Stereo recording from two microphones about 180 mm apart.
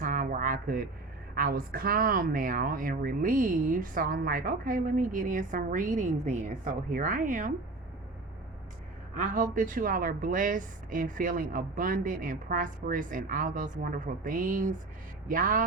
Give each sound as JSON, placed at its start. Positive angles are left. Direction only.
{"t": 0.0, "sound": "a sound", "side_deg": -50}
{"t": 1.4, "sound": "speech", "side_deg": -55}
{"t": 9.1, "sound": "speech", "side_deg": -50}